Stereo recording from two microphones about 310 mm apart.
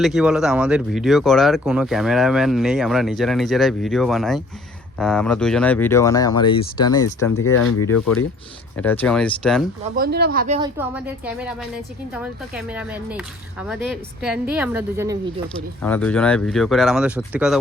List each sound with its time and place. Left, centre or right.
0.0 s speech: centre
7.6 s speech: left
8.7 s speech: centre
9.9 s speech: right
10.8 s speech: centre
15.8 s speech: centre